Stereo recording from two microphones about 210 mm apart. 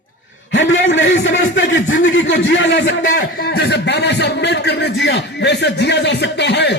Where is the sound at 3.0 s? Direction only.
40° left (ahead or behind).